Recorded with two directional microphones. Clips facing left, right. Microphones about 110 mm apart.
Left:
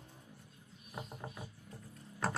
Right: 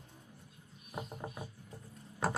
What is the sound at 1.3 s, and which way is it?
Music, 20° right (ahead or behind).